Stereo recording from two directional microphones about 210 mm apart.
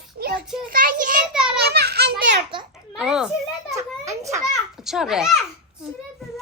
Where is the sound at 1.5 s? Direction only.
50° right (ahead or behind).